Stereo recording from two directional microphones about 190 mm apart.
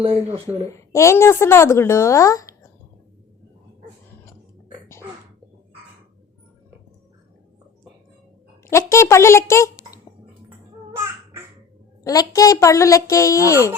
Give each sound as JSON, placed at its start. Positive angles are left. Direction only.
{"t": 0.0, "sound": "speech", "side_deg": -30}
{"t": 0.7, "sound": "a woman's voice", "side_deg": 15}
{"t": 8.9, "sound": "a child's voice", "side_deg": 15}
{"t": 12.0, "sound": "a woman's voice", "side_deg": 20}